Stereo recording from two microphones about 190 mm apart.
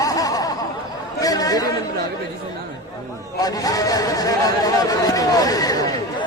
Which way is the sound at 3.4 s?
20° left (ahead or behind).